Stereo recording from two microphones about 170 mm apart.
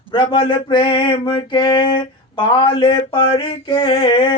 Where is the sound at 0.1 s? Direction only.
30° left (ahead or behind).